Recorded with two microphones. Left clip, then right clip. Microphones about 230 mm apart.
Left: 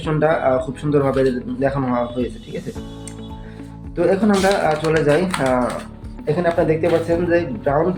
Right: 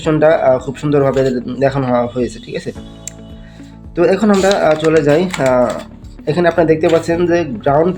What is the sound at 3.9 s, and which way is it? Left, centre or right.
Speech, right.